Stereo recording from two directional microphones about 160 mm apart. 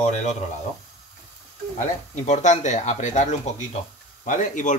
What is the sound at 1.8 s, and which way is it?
Speech, 50° left (ahead or behind).